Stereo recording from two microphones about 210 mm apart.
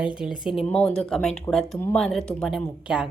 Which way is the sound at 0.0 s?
5° right (ahead or behind).